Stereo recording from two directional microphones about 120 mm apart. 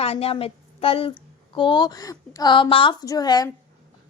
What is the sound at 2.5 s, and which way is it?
Speech, 45° left (ahead or behind).